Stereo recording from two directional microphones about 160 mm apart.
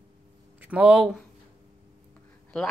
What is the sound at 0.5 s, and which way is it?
Speech, 10° right (ahead or behind).